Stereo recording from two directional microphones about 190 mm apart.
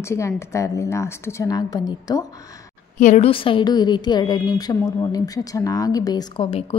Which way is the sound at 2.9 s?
40° left (ahead or behind).